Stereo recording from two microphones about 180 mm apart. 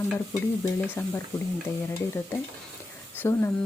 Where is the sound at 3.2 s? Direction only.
15° left (ahead or behind).